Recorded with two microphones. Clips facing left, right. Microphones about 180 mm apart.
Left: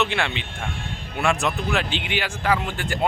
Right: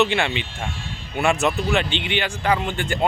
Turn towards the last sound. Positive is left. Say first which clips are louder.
# right 2 dB
turn(degrees=0)  # may be behind; listen again after turning